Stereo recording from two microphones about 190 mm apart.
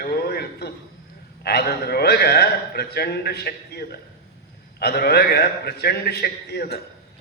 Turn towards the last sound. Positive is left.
turn(degrees=55)  # may be behind; listen again after turning